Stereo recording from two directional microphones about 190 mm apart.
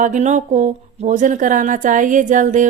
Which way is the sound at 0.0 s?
40° right (ahead or behind).